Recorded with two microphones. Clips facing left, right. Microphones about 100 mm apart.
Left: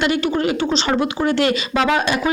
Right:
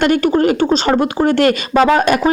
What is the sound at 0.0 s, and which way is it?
Speech, 50° right (ahead or behind).